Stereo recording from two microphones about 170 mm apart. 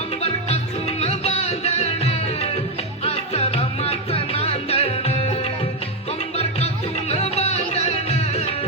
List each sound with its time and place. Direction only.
0.2 s music: 35° left (ahead or behind)